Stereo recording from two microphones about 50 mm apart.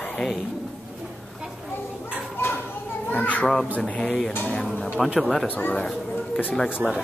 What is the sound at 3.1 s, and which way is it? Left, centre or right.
Speech, left.